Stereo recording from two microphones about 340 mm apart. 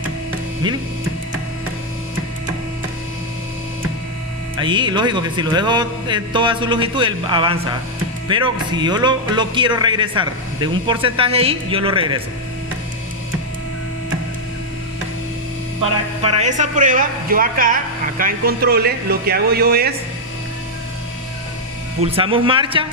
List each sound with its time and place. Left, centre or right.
4.6 s speech: centre
15.8 s a man's voice: centre
22.0 s speech: centre